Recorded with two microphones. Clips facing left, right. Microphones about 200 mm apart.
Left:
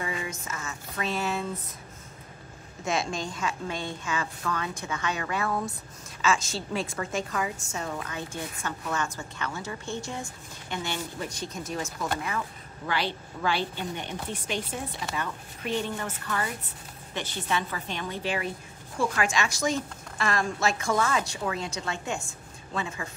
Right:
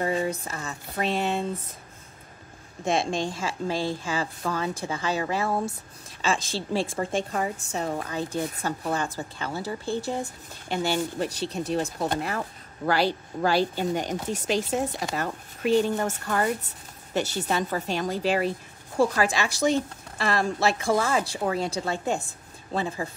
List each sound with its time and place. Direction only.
0.0 s a woman's voice: 40° right (ahead or behind)
2.8 s a woman's voice: 30° right (ahead or behind)
12.2 s a woman's voice: 40° right (ahead or behind)